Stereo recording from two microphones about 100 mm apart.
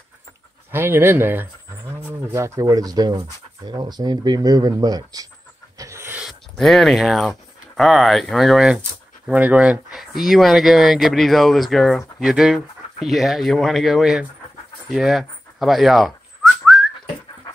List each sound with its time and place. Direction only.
0.7 s speech: 20° right (ahead or behind)
2.6 s speech: 40° right (ahead or behind)
5.8 s dog: 30° right (ahead or behind)
6.5 s speech: 5° left (ahead or behind)
14.9 s whistling: centre (ahead or behind)